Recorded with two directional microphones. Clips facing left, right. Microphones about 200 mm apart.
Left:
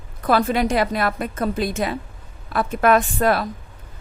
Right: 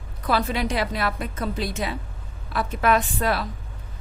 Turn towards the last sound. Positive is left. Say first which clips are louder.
# left 5 dB
turn(degrees=50)  # may be behind; listen again after turning